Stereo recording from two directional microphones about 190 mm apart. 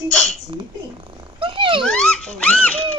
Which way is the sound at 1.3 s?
25° right (ahead or behind).